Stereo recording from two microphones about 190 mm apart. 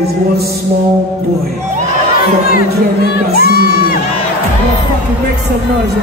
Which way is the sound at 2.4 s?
50° left (ahead or behind).